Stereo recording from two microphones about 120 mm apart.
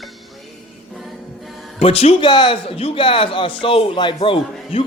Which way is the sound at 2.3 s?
40° left (ahead or behind).